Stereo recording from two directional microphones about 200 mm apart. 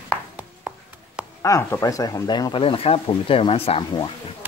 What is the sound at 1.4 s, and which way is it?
Speech, 15° left (ahead or behind).